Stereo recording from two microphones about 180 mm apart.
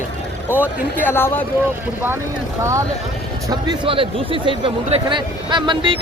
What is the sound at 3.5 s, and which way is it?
Speech, 25° right (ahead or behind).